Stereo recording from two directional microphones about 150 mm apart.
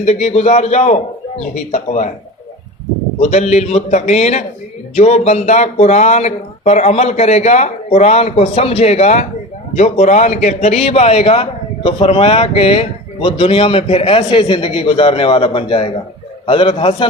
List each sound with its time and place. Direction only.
0.0 s speech: 45° left (ahead or behind)
3.2 s a man's voice: 45° left (ahead or behind)